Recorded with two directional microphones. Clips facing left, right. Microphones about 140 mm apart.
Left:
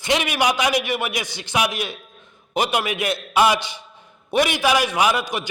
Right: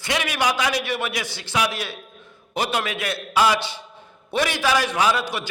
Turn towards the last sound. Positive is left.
turn(degrees=15)  # may be behind; listen again after turning